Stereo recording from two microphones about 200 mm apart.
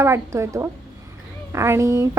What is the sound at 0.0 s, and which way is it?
A woman's voice, 15° right (ahead or behind).